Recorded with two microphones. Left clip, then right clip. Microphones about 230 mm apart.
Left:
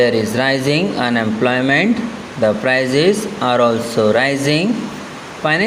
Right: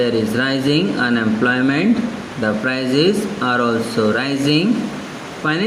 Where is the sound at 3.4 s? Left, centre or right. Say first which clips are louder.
Left 5 dB; left.